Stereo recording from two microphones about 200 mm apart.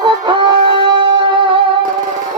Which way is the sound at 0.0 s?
20° right (ahead or behind).